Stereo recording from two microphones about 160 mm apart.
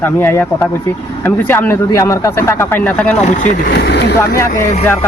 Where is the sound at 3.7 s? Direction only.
85° left.